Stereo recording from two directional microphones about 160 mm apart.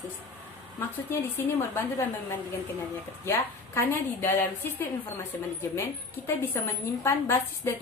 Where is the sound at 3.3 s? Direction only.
15° left (ahead or behind).